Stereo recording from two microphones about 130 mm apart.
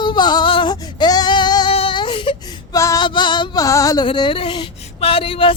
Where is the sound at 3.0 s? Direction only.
35° left (ahead or behind).